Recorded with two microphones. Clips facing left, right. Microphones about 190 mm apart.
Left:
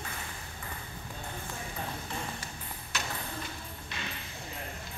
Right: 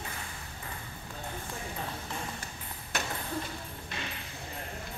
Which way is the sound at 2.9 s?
55° right (ahead or behind).